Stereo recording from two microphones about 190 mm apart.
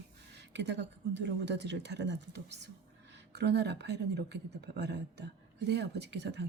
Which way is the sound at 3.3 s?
60° right (ahead or behind).